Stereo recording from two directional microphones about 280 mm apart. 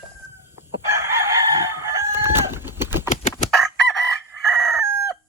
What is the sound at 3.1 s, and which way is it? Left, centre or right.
Chicken, left.